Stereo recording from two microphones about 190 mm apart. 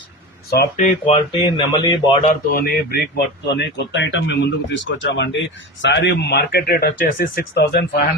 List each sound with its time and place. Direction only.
0.5 s speech: 50° left (ahead or behind)
1.0 s speech: 30° left (ahead or behind)
2.2 s speech: 50° left (ahead or behind)
3.4 s speech: 65° left (ahead or behind)